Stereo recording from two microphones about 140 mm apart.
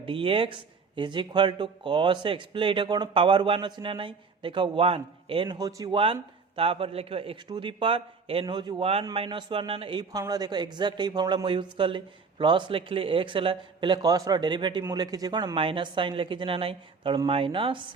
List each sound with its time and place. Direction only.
0.0 s a man's voice: 40° right (ahead or behind)
5.5 s speech: 25° right (ahead or behind)
5.9 s a man's voice: 40° right (ahead or behind)
8.8 s a man's voice: 45° right (ahead or behind)